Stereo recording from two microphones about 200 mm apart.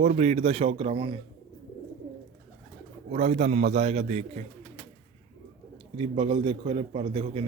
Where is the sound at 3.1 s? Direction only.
35° right (ahead or behind).